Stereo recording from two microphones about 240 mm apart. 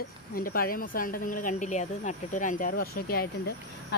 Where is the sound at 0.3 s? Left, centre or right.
Left.